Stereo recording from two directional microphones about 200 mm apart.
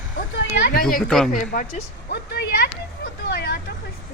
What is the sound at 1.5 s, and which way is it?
Speech, 40° left (ahead or behind).